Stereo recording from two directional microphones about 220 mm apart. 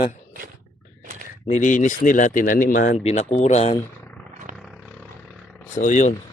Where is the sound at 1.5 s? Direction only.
35° left (ahead or behind).